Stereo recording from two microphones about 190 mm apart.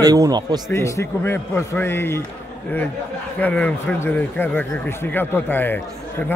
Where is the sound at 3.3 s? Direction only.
10° left (ahead or behind).